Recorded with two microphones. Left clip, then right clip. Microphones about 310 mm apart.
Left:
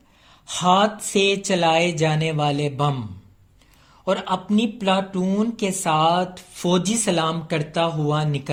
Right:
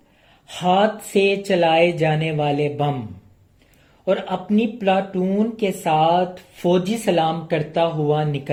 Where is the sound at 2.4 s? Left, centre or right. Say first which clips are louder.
Right 2 dB; left.